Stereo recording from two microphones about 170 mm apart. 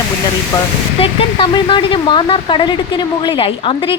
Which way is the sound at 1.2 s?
30° left (ahead or behind).